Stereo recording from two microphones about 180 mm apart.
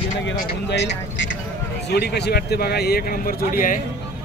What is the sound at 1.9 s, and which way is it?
Speech, 65° left (ahead or behind).